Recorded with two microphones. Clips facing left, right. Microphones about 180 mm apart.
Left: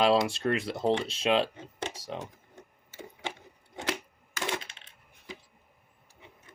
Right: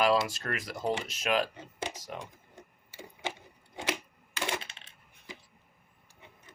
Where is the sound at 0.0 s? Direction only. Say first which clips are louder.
Left 3 dB; 25° left (ahead or behind).